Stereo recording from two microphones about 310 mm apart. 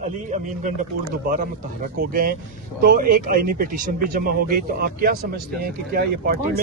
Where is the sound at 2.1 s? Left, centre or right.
Right.